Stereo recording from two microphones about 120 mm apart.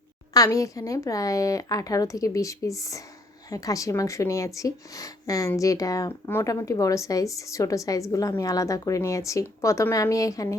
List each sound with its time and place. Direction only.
0.3 s speech: 30° left (ahead or behind)